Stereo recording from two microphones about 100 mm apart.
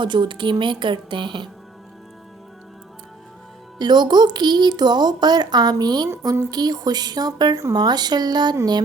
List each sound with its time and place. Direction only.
0.0 s a woman's voice: 50° right (ahead or behind)
3.8 s a woman's voice: 45° right (ahead or behind)
6.1 s a woman's voice: 25° right (ahead or behind)
6.5 s a woman's voice: 40° right (ahead or behind)